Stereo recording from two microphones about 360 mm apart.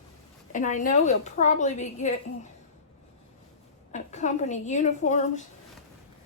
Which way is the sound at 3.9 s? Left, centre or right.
Centre.